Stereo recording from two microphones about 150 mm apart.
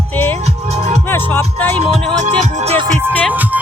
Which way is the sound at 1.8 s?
50° right (ahead or behind).